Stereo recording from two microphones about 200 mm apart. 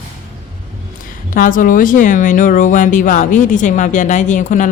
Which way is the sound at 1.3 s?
45° left (ahead or behind).